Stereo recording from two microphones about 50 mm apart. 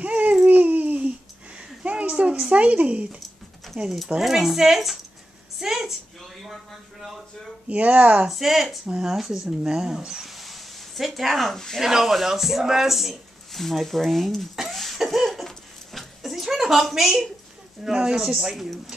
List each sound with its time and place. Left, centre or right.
0.0 s babbling: right
1.8 s a sound: right
2.5 s speech: right
4.2 s speech: centre
5.6 s a sound: centre
6.4 s speech: centre
7.6 s speech: right
8.3 s speech: centre
11.8 s speech: centre
14.5 s a sound: centre
16.8 s speech: centre